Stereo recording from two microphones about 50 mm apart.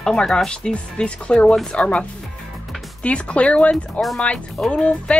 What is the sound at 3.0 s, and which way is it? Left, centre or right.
Speech, left.